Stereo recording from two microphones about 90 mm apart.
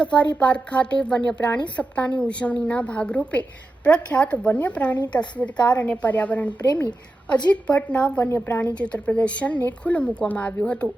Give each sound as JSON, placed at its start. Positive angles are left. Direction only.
{"t": 0.0, "sound": "speech", "side_deg": 10}